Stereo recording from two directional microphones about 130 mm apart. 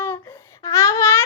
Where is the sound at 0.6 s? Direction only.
25° left (ahead or behind).